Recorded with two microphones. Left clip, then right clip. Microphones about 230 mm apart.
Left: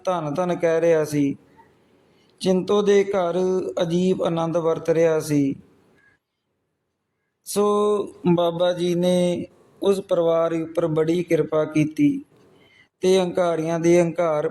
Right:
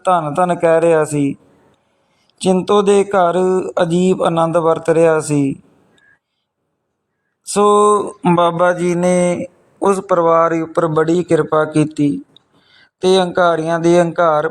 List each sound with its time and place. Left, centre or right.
0.0 s speech: centre
2.4 s speech: centre
7.5 s a sound: centre
8.2 s a man's voice: centre
10.7 s speech: centre
13.0 s speech: centre